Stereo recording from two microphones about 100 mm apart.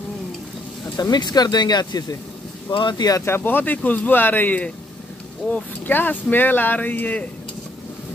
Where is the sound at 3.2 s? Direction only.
20° left (ahead or behind).